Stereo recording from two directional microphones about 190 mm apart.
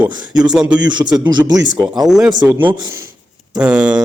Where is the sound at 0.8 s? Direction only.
25° right (ahead or behind).